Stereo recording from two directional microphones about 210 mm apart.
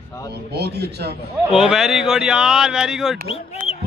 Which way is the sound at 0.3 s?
50° right (ahead or behind).